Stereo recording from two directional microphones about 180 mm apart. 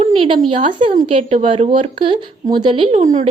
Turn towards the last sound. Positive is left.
turn(degrees=-40)  # may be behind; listen again after turning